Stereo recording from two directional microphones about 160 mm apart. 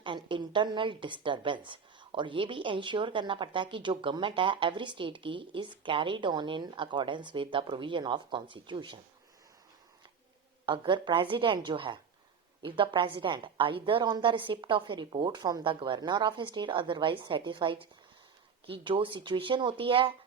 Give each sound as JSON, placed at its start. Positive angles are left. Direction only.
{"t": 0.0, "sound": "a woman's voice", "side_deg": -30}
{"t": 10.7, "sound": "a woman's voice", "side_deg": -30}